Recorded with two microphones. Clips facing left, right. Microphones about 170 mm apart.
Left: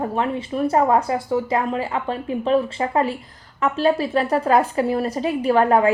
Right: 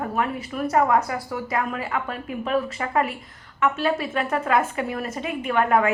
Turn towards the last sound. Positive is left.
turn(degrees=30)  # may be behind; listen again after turning